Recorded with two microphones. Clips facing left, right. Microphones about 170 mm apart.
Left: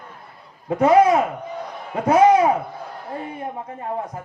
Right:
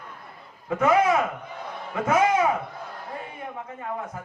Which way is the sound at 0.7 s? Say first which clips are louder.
Left 6 dB; 35° left (ahead or behind).